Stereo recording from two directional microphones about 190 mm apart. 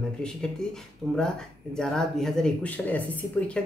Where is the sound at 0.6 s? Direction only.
5° left (ahead or behind).